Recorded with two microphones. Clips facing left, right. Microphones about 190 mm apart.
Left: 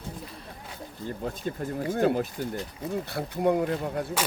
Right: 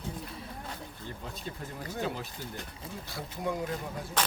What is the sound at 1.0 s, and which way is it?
Speech, 50° left (ahead or behind).